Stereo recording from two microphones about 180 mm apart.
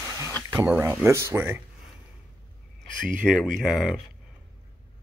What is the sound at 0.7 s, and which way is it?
Speech, 15° right (ahead or behind).